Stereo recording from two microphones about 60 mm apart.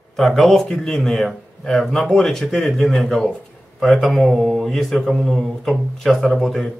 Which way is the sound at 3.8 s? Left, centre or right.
Centre.